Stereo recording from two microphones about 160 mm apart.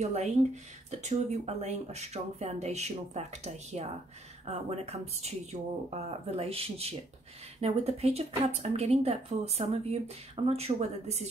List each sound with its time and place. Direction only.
0.0 s a woman's voice: 45° right (ahead or behind)